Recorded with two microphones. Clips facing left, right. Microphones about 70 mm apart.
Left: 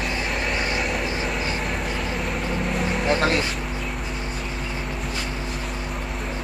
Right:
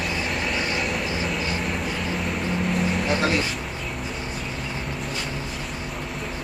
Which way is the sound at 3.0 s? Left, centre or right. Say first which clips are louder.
Left 4 dB; left.